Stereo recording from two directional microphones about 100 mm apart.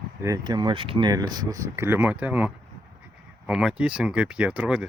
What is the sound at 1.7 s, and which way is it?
Speech, 25° right (ahead or behind).